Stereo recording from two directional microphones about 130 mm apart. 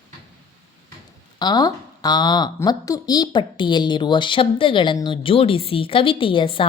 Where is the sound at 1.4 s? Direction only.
30° left (ahead or behind).